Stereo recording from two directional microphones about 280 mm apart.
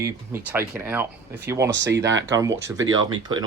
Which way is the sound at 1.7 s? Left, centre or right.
Right.